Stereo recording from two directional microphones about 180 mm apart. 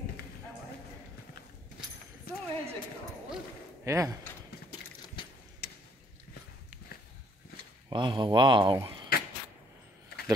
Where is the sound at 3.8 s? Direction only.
15° right (ahead or behind).